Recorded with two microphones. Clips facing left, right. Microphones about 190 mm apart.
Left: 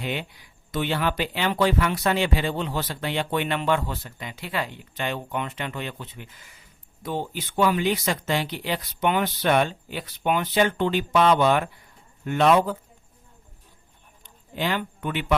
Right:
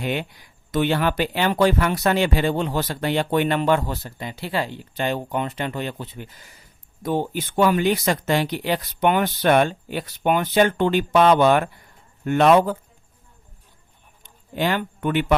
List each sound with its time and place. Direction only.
0.0 s speech: 50° right (ahead or behind)
7.0 s speech: 50° right (ahead or behind)
14.5 s speech: 50° right (ahead or behind)